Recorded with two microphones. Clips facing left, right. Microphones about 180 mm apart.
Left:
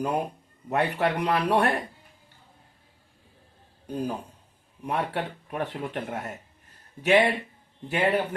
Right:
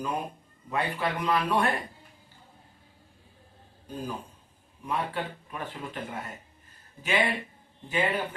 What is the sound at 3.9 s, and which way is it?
Speech, 65° left (ahead or behind).